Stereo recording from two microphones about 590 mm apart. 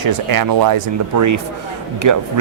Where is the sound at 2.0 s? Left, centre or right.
Right.